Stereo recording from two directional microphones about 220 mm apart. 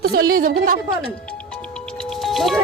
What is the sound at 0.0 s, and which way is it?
Speech, 45° right (ahead or behind).